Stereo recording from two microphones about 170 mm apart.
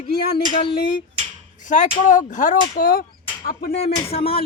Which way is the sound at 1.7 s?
45° left (ahead or behind).